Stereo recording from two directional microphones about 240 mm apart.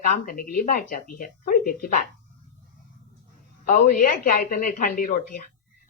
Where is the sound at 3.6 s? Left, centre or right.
Left.